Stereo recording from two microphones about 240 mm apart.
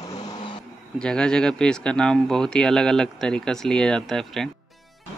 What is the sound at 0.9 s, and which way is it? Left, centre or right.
Speech, centre.